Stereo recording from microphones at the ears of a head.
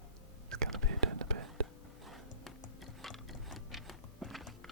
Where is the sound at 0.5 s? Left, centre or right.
Right.